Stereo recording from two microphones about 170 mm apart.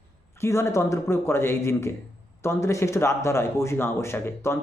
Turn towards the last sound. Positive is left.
turn(degrees=15)  # may be behind; listen again after turning